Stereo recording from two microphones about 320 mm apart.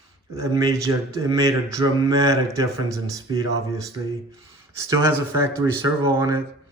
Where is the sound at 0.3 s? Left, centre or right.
Centre.